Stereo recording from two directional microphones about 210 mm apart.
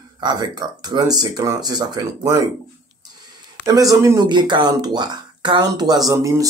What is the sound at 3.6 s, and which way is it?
Speech, 15° right (ahead or behind).